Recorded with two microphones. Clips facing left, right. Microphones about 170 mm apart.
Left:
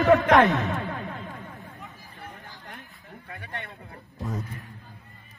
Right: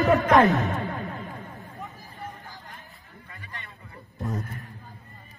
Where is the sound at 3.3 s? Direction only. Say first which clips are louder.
Left 6 dB; 65° left (ahead or behind).